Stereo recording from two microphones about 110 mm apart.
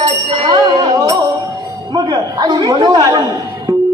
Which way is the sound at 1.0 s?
30° right (ahead or behind).